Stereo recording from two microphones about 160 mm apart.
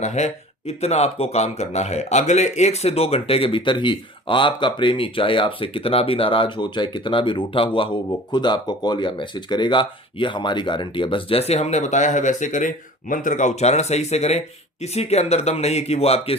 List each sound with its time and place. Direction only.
0.0 s speech: 45° left (ahead or behind)